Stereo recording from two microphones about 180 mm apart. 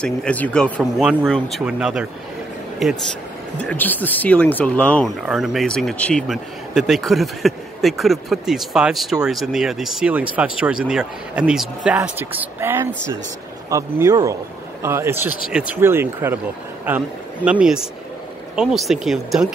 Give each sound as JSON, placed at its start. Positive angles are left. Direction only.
{"t": 0.0, "sound": "speech", "side_deg": 5}